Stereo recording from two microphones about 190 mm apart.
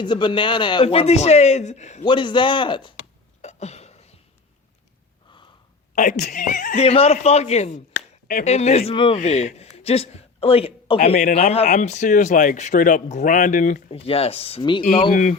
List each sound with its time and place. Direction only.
0.0 s speech: 25° left (ahead or behind)
2.0 s speech: 25° left (ahead or behind)
3.4 s a sound: 35° left (ahead or behind)
5.9 s speech: 45° left (ahead or behind)
7.9 s a sound: 45° left (ahead or behind)
8.9 s speech: 30° left (ahead or behind)
11.1 s speech: 50° left (ahead or behind)
11.3 s speech: 35° left (ahead or behind)
13.9 s speech: 30° left (ahead or behind)
15.1 s speech: 45° left (ahead or behind)